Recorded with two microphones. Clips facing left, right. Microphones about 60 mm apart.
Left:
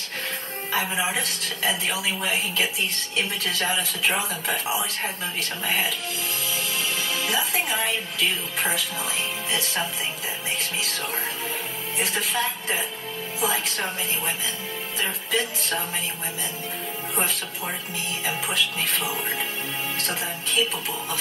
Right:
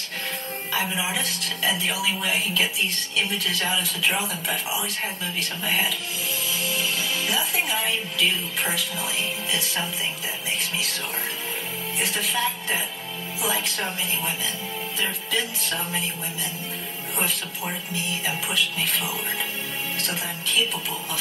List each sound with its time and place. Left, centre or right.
0.7 s speech: left
7.2 s speech: left
12.0 s speech: left
18.2 s speech: left